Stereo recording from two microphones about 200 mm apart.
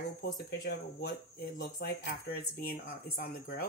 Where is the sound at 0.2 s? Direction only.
55° left (ahead or behind).